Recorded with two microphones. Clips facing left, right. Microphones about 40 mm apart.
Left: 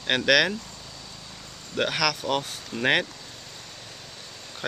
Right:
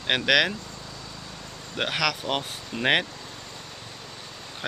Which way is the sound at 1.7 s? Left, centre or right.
Centre.